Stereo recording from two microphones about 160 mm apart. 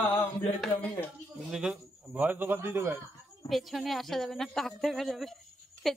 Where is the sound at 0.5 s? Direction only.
5° left (ahead or behind).